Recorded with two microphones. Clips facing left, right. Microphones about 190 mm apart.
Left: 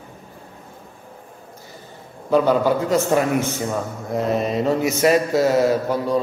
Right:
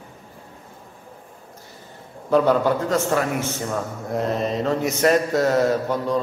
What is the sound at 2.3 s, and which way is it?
Speech, 5° left (ahead or behind).